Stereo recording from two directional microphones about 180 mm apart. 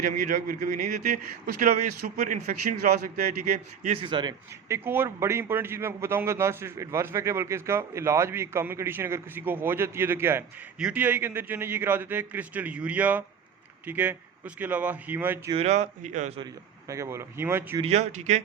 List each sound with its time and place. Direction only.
0.0 s speech: 50° right (ahead or behind)
3.8 s a man's voice: 30° right (ahead or behind)
4.8 s a man's voice: 10° right (ahead or behind)
15.5 s speech: 40° right (ahead or behind)
16.9 s a man's voice: 15° right (ahead or behind)
17.7 s speech: 35° right (ahead or behind)